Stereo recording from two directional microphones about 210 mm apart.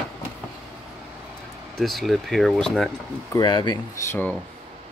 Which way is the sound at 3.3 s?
20° left (ahead or behind).